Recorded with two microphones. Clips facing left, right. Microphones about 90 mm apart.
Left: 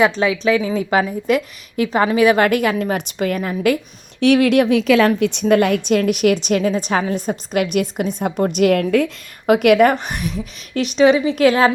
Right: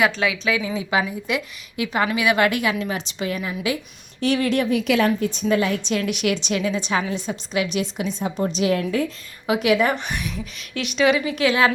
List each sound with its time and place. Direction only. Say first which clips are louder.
0.0 s a woman's voice: left 5 dB; 35° left (ahead or behind); by 3.8 s 50° left (ahead or behind)
4.2 s a woman's voice: left 7 dB; 65° left (ahead or behind)
10.0 s a woman's voice: left 4 dB; 40° left (ahead or behind)
11.3 s a woman's voice: left 6 dB; 45° left (ahead or behind)